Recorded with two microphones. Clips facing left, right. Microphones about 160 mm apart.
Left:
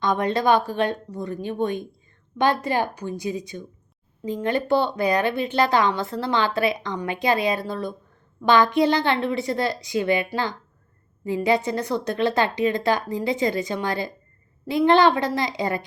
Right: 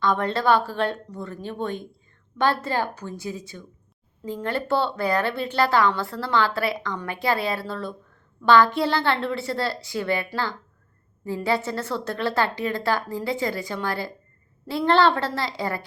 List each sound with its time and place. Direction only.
0.0 s a woman's voice: 15° left (ahead or behind)